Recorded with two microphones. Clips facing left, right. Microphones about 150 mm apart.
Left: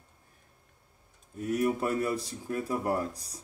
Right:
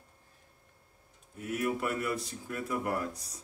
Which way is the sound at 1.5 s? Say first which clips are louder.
Left 4 dB; 30° left (ahead or behind).